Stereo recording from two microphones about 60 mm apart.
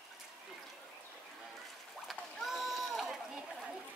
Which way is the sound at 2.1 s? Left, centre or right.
Centre.